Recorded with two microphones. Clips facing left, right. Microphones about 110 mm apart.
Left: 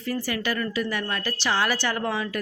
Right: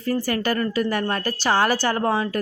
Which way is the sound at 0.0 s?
45° right (ahead or behind).